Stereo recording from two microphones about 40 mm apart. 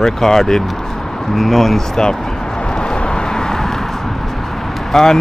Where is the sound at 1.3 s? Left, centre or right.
Centre.